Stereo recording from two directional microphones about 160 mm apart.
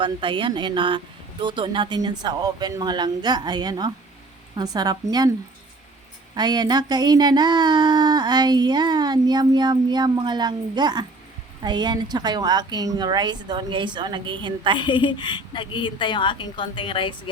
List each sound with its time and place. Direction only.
0.0 s speech: 30° right (ahead or behind)
6.3 s speech: 25° right (ahead or behind)
14.8 s a woman's voice: 30° left (ahead or behind)